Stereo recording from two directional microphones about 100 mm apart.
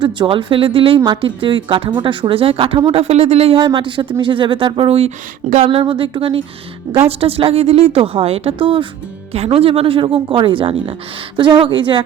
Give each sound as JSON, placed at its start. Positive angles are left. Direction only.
{"t": 0.0, "sound": "speech", "side_deg": -55}
{"t": 2.9, "sound": "speech", "side_deg": -90}
{"t": 3.8, "sound": "a woman's voice", "side_deg": -55}
{"t": 6.9, "sound": "a woman's voice", "side_deg": -75}
{"t": 9.3, "sound": "a woman's voice", "side_deg": -90}
{"t": 11.3, "sound": "speech", "side_deg": -55}